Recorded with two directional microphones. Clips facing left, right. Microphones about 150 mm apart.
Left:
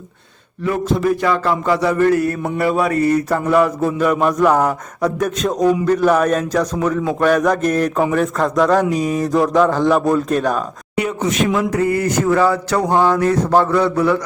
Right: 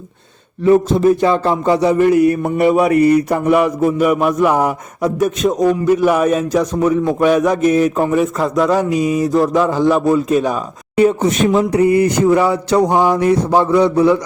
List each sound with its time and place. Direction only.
0.6 s a sound: 25° right (ahead or behind)
2.6 s a man's voice: 20° right (ahead or behind)
11.0 s speech: 30° right (ahead or behind)